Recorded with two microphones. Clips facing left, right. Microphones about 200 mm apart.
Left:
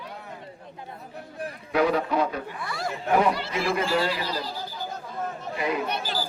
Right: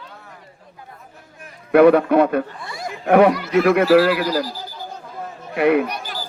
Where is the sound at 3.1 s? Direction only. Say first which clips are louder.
Right 9 dB; 65° right (ahead or behind).